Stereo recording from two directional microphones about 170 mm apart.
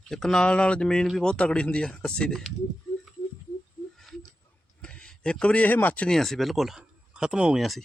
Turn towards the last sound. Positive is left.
turn(degrees=0)  # may be behind; listen again after turning